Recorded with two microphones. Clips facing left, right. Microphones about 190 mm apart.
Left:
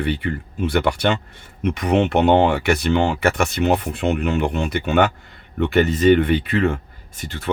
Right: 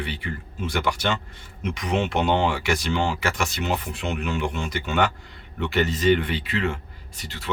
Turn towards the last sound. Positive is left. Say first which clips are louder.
# left 7 dB
turn(degrees=50)  # may be behind; listen again after turning